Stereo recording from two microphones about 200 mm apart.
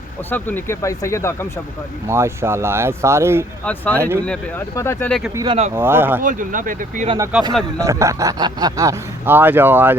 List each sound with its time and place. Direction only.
0.3 s speech: 10° left (ahead or behind)
2.0 s speech: 15° right (ahead or behind)
3.6 s speech: 5° left (ahead or behind)
5.3 s speech: 20° right (ahead or behind)
6.2 s speech: 40° right (ahead or behind)
7.3 s speech: 5° right (ahead or behind)
7.8 s speech: 15° right (ahead or behind)